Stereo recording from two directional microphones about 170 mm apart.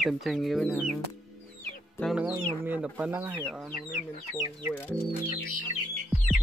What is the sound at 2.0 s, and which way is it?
Speech, 5° right (ahead or behind).